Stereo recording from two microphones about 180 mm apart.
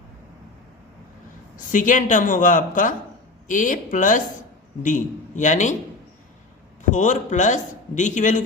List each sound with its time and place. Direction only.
1.5 s speech: 45° left (ahead or behind)
6.9 s speech: 45° left (ahead or behind)